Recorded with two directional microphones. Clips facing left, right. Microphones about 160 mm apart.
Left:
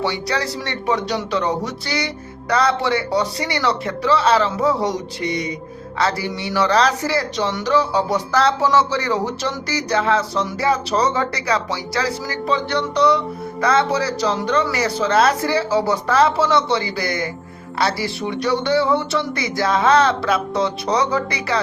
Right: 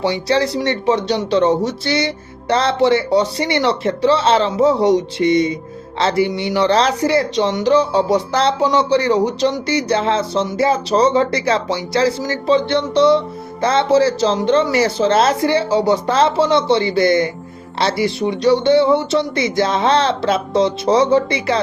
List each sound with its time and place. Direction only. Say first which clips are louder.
0.0 s speech: right 6 dB; 20° right (ahead or behind)